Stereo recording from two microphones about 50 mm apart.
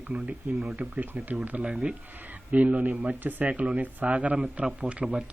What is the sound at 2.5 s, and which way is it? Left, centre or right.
Speech, right.